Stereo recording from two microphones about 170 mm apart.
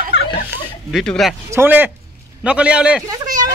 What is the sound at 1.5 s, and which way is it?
Speech, 10° right (ahead or behind).